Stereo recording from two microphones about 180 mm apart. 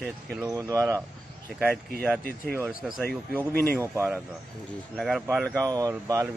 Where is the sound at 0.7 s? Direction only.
20° right (ahead or behind).